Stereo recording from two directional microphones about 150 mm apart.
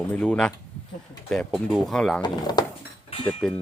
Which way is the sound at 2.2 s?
30° left (ahead or behind).